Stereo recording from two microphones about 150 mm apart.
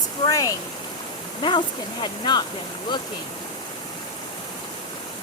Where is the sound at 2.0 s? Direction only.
30° left (ahead or behind).